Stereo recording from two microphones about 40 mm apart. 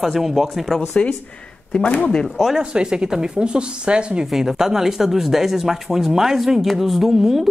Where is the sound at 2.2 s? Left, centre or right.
Centre.